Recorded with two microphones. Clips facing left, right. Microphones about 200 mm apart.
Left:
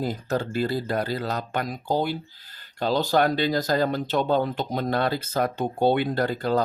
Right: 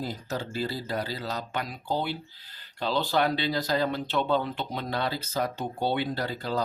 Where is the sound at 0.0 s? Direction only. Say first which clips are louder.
Left 6 dB; 55° left (ahead or behind).